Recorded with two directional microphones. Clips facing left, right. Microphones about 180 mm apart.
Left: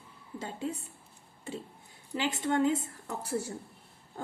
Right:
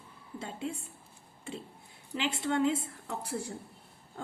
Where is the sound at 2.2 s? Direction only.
40° left (ahead or behind).